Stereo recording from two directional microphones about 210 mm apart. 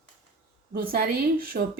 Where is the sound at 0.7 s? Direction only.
45° right (ahead or behind).